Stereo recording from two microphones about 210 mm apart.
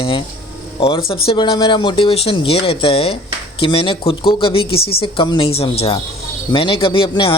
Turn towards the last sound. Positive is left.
turn(degrees=25)  # may be behind; listen again after turning